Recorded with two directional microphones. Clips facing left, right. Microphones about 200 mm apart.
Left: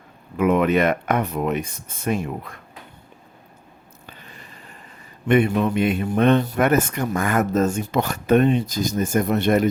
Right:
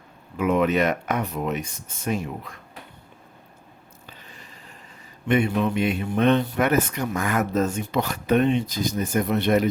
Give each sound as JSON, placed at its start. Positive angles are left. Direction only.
{"t": 0.3, "sound": "speech", "side_deg": 55}
{"t": 5.3, "sound": "speech", "side_deg": 55}